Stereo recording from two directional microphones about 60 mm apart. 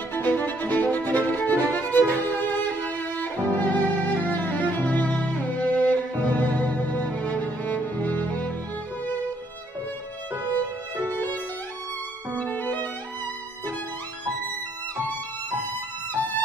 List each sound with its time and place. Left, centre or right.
0.1 s music: left
3.2 s violin: left
12.4 s music: left